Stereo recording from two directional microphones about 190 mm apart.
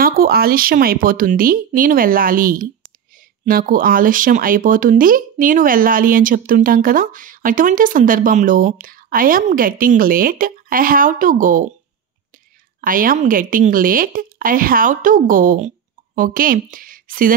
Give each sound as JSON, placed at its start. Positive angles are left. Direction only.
{"t": 0.0, "sound": "speech", "side_deg": -50}
{"t": 12.8, "sound": "speech", "side_deg": -45}